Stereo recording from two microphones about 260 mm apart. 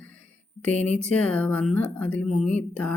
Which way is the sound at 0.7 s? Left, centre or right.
Right.